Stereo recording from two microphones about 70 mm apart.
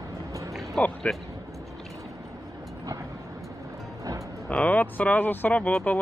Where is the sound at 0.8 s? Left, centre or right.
Centre.